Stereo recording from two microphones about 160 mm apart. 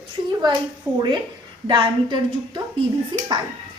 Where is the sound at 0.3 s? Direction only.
25° right (ahead or behind).